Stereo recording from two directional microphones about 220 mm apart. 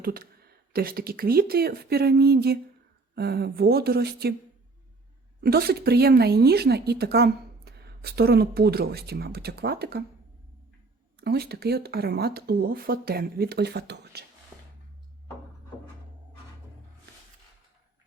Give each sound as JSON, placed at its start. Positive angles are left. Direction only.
{"t": 0.0, "sound": "a woman's voice", "side_deg": -40}
{"t": 5.4, "sound": "a woman's voice", "side_deg": -45}
{"t": 11.2, "sound": "a woman's voice", "side_deg": -45}
{"t": 14.5, "sound": "music", "side_deg": -5}